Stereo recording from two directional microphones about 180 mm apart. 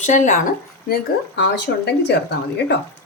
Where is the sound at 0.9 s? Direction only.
70° left (ahead or behind).